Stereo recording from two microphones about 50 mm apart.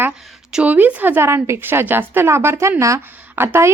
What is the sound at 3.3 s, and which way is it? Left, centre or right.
Speech, right.